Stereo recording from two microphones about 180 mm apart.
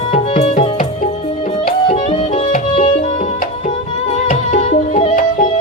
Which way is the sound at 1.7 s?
50° left (ahead or behind).